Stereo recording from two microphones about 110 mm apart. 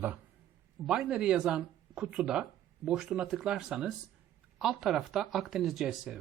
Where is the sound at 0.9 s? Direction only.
5° right (ahead or behind).